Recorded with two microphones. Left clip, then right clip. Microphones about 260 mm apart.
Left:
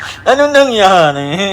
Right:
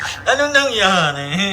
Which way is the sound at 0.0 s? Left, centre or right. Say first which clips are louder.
Left 6 dB; centre.